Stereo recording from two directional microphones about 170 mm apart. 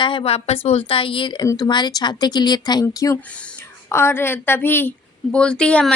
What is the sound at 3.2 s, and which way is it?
A woman's voice, 5° left (ahead or behind).